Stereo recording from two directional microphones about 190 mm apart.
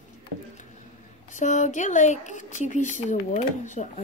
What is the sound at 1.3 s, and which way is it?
Speech, 40° left (ahead or behind).